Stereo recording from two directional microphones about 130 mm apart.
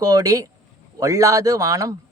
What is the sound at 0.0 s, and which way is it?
Speech, 30° right (ahead or behind).